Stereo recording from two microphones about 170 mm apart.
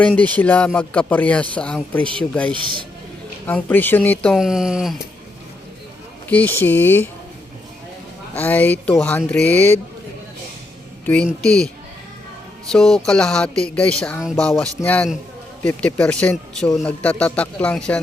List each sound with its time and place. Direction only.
0.0 s speech: 5° left (ahead or behind)
2.5 s a man's voice: 30° right (ahead or behind)
3.4 s speech: 10° left (ahead or behind)
6.2 s speech: 10° left (ahead or behind)
8.4 s speech: 10° left (ahead or behind)
11.0 s speech: 5° left (ahead or behind)
12.7 s speech: 5° left (ahead or behind)